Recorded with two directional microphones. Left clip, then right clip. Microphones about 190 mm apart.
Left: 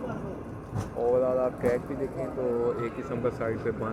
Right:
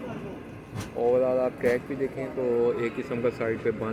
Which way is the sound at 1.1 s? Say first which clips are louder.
Right 1 dB; 65° right (ahead or behind).